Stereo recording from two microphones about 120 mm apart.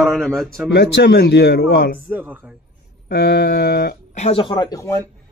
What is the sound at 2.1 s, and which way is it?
Speech, 15° right (ahead or behind).